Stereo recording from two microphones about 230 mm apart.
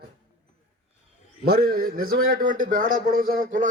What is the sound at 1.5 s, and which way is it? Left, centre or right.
Speech, right.